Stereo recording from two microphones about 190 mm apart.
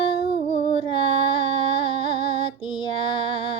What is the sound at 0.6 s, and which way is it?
Music, 30° left (ahead or behind).